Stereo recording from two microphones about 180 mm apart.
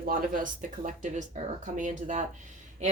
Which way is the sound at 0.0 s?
50° right (ahead or behind).